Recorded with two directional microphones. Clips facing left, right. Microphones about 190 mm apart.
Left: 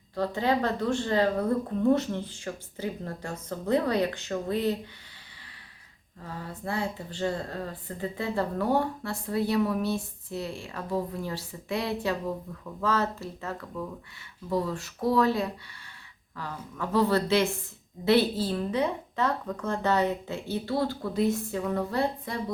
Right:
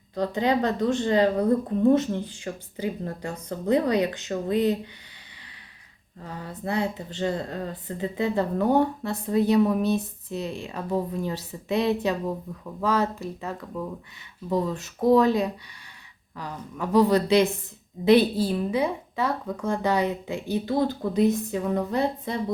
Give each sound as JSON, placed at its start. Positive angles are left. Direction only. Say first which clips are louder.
{"t": 0.2, "sound": "speech", "louder": "right 3 dB", "side_deg": -20}
{"t": 6.5, "sound": "speech", "louder": "right 5 dB", "side_deg": -20}